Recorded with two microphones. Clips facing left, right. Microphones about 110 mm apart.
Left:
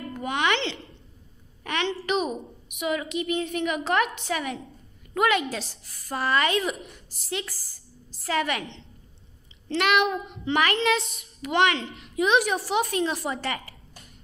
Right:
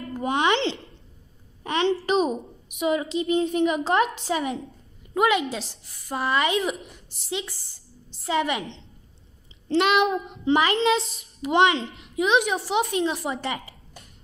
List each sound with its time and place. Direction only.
0.1 s a sound: 30° right (ahead or behind)
2.0 s a woman's voice: 30° right (ahead or behind)
12.2 s a woman's voice: 15° right (ahead or behind)